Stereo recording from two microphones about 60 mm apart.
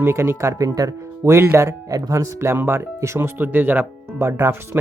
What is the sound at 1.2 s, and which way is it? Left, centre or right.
Speech, right.